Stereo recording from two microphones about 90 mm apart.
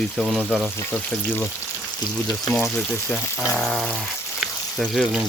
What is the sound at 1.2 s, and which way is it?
Speech, 20° left (ahead or behind).